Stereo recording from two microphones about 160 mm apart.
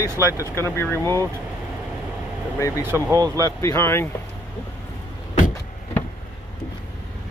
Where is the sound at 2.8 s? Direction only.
15° right (ahead or behind).